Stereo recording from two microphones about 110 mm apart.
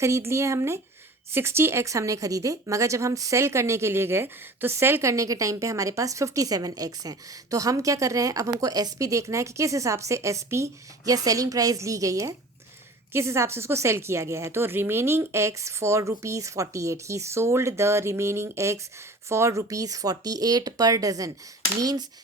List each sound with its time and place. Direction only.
0.0 s speech: 25° right (ahead or behind)